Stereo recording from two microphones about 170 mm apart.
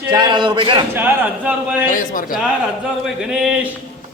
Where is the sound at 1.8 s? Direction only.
50° left (ahead or behind).